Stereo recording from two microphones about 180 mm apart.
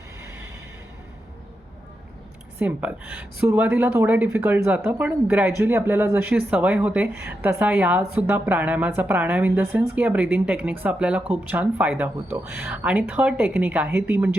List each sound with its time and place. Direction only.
2.6 s speech: 10° right (ahead or behind)